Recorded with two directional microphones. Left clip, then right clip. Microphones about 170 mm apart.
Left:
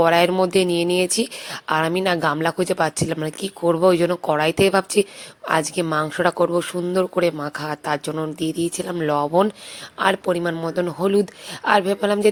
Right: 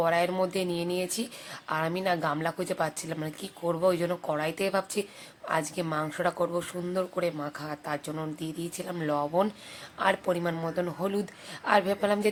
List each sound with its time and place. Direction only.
0.0 s speech: 45° left (ahead or behind)